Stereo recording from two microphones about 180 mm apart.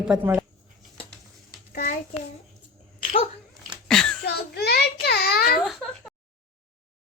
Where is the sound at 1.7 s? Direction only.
50° left (ahead or behind).